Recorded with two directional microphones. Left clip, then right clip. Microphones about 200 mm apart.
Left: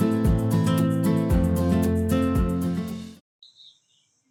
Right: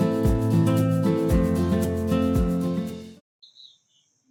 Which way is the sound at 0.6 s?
Centre (ahead or behind).